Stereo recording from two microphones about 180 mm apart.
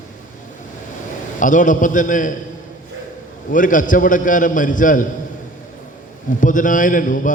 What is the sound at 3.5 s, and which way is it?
A man's voice, 45° left (ahead or behind).